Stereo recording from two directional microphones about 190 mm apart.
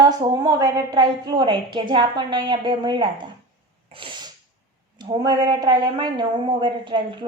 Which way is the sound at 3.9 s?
25° right (ahead or behind).